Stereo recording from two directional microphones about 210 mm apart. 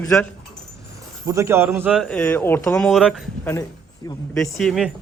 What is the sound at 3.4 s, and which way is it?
A man's voice, 10° left (ahead or behind).